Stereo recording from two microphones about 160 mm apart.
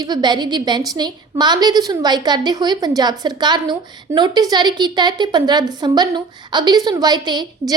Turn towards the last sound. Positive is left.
turn(degrees=-25)  # may be behind; listen again after turning